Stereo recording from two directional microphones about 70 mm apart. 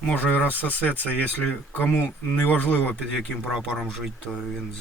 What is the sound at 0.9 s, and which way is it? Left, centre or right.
Speech, left.